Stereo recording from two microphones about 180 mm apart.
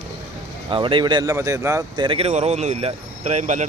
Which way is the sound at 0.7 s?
25° right (ahead or behind).